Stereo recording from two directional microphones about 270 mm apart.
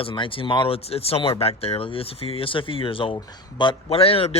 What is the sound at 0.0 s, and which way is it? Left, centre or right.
Speech, centre.